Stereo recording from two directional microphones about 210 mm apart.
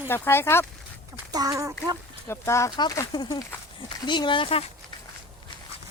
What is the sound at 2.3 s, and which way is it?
Speech, 15° left (ahead or behind).